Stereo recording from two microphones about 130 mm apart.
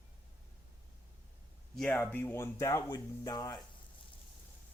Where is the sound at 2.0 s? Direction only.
15° left (ahead or behind).